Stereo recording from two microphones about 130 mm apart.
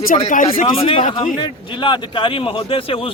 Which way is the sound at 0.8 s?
45° left (ahead or behind).